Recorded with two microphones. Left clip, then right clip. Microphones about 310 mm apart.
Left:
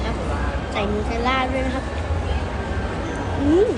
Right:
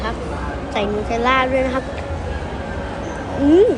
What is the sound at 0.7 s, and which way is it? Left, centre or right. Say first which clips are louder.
Speech: right 4 dB; centre.